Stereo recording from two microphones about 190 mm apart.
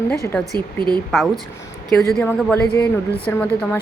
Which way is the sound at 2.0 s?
Centre (ahead or behind).